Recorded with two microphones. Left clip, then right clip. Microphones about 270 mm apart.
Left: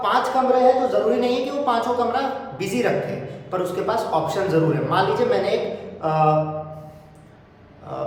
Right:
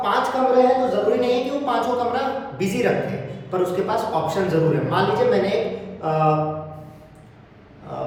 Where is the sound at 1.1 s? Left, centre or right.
Centre.